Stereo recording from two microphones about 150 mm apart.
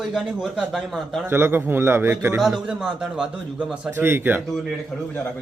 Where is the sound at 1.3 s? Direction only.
15° right (ahead or behind).